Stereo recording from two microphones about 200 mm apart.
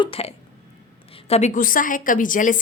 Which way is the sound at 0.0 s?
30° left (ahead or behind).